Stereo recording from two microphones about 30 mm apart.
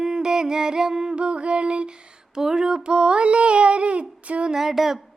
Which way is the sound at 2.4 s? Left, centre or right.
Centre.